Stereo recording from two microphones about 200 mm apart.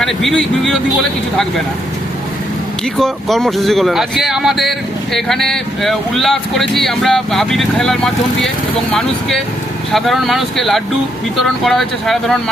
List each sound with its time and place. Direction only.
0.0 s speech: centre (ahead or behind)
3.0 s speech: centre (ahead or behind)